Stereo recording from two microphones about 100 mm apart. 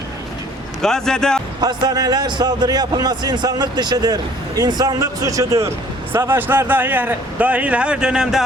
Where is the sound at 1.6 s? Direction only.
40° right (ahead or behind).